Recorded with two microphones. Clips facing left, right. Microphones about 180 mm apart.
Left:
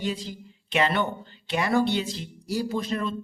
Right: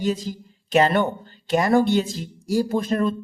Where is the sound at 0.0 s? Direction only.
45° right (ahead or behind).